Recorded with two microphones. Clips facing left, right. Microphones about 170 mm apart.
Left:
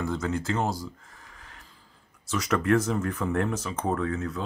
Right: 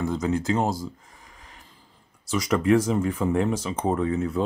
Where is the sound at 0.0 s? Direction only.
15° right (ahead or behind).